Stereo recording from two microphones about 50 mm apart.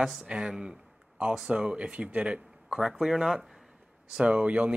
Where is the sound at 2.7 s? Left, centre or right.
Centre.